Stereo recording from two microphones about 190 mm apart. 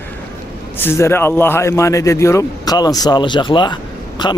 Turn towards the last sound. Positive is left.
turn(degrees=25)  # may be behind; listen again after turning